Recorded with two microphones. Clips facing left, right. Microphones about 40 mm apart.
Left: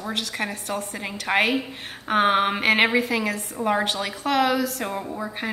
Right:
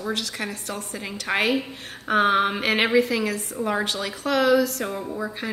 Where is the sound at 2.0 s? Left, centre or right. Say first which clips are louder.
Even; left.